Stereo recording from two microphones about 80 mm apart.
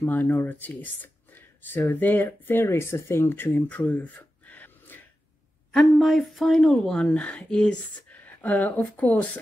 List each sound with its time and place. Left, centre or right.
0.0 s speech: left
5.7 s speech: centre